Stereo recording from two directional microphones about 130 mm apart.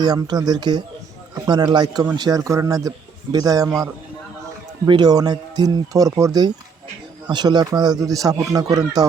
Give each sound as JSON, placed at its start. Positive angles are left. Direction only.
{"t": 0.0, "sound": "speech", "side_deg": -30}
{"t": 4.9, "sound": "speech", "side_deg": -30}